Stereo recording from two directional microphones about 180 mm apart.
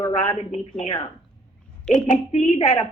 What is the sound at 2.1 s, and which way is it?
Speech, 40° left (ahead or behind).